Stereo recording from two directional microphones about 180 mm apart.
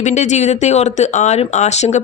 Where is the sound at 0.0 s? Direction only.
40° left (ahead or behind).